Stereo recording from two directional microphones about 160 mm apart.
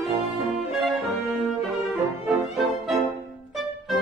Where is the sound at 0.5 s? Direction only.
Centre (ahead or behind).